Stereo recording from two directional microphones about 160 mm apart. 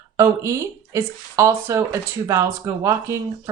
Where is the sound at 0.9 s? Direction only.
20° right (ahead or behind).